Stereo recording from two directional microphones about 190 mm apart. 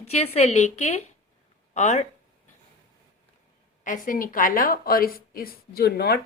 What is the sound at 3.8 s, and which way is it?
Speech, 45° left (ahead or behind).